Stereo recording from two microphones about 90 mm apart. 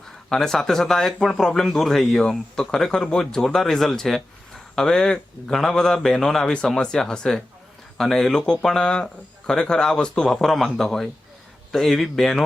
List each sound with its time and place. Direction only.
0.0 s speech: 5° left (ahead or behind)